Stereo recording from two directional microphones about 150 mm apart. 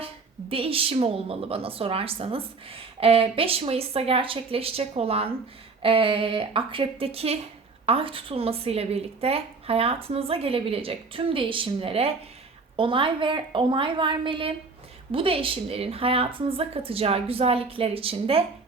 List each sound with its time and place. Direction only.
0.0 s speech: 40° right (ahead or behind)